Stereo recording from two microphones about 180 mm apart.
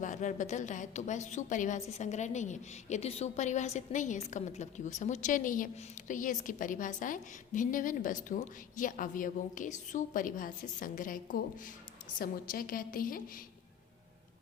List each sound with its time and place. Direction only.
0.0 s a woman's voice: 45° left (ahead or behind)